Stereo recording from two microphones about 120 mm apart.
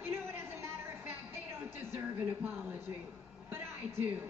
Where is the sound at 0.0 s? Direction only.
20° right (ahead or behind).